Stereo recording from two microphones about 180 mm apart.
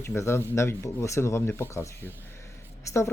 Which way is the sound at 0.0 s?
15° left (ahead or behind).